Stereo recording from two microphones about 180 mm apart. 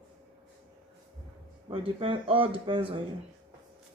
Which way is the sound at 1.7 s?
30° right (ahead or behind).